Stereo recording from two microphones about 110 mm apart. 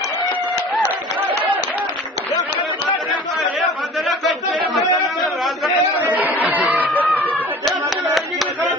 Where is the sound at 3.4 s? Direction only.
Centre (ahead or behind).